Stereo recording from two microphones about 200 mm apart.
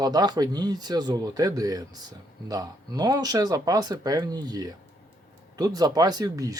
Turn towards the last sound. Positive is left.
turn(degrees=-15)  # may be behind; listen again after turning